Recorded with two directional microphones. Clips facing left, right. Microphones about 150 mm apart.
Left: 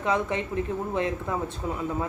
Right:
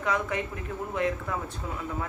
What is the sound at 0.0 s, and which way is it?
Speech, 25° left (ahead or behind).